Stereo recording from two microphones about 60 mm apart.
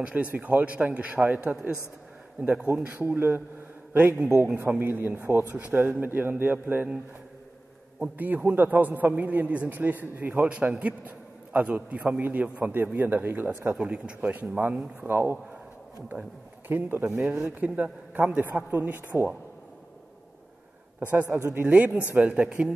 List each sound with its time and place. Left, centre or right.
0.0 s a man's voice: right
8.2 s a man's voice: right
13.8 s a man's voice: right
15.0 s a man's voice: right
21.0 s a man's voice: right